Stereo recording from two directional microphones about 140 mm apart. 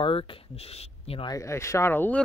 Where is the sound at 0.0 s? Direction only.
40° left (ahead or behind).